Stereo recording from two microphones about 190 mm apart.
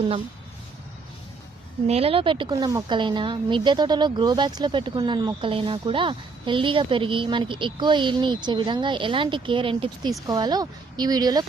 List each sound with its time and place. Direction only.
1.9 s speech: 30° right (ahead or behind)